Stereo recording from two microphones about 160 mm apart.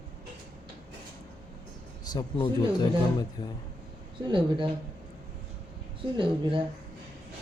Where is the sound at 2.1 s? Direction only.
25° left (ahead or behind).